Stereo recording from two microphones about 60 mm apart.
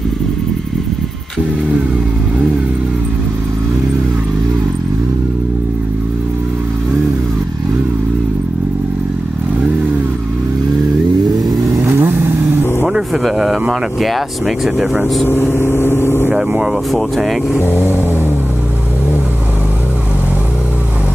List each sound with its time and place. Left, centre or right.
11.9 s vehicle: right
12.8 s music: centre
13.2 s a sound: centre
13.9 s speech: centre
15.2 s speech: left
16.3 s speech: centre
17.6 s speech: left